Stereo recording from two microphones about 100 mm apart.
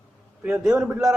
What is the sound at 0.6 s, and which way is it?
Speech, 5° right (ahead or behind).